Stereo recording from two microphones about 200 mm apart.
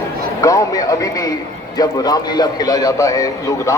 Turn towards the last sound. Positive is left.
turn(degrees=15)  # may be behind; listen again after turning